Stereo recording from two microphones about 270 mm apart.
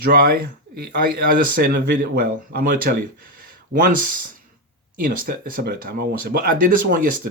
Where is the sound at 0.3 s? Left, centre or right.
Right.